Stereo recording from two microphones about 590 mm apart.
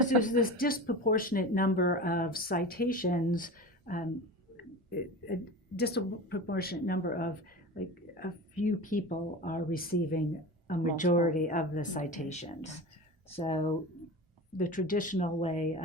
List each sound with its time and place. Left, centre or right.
0.0 s speech: centre
5.3 s speech: centre